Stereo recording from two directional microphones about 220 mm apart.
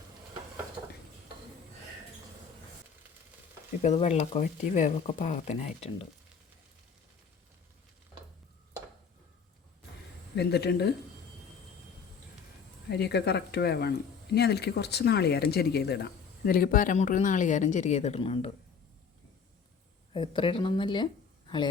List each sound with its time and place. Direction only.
0.8 s dishes: 20° right (ahead or behind)
3.8 s a woman's voice: 30° left (ahead or behind)
10.3 s speech: 50° left (ahead or behind)
12.9 s a woman's voice: 50° left (ahead or behind); by 18.5 s 25° left (ahead or behind)
20.1 s speech: 20° left (ahead or behind)